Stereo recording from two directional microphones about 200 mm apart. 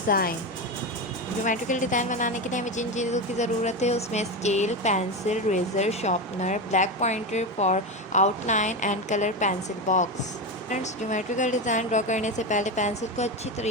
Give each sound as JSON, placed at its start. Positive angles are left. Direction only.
{"t": 0.1, "sound": "speech", "side_deg": 45}
{"t": 1.5, "sound": "a woman's voice", "side_deg": 40}